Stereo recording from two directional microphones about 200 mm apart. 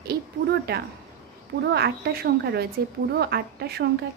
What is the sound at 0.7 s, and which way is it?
Speech, 50° right (ahead or behind).